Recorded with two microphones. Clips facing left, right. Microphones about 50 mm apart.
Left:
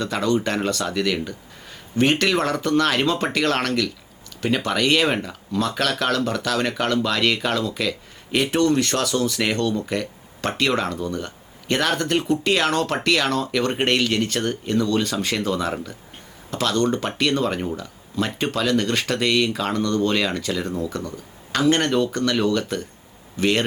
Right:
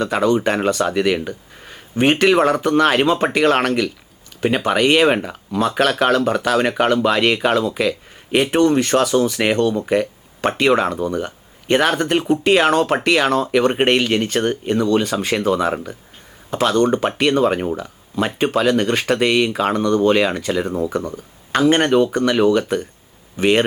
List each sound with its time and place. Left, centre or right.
0.0 s speech: centre